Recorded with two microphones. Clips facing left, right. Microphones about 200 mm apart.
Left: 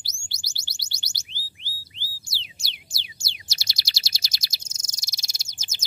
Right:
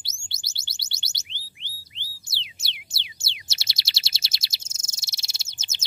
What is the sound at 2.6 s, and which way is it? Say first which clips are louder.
Chirp: right 1 dB; 20° right (ahead or behind).